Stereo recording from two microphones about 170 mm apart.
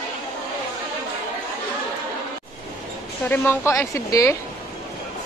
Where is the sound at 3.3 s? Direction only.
10° left (ahead or behind).